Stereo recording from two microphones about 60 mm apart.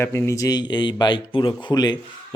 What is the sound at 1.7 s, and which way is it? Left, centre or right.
Speech, left.